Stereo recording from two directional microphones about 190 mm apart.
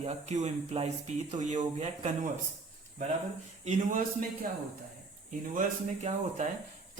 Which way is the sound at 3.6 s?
40° right (ahead or behind).